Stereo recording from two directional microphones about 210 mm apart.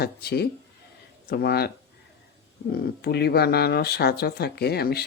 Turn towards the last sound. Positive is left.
turn(degrees=50)  # may be behind; listen again after turning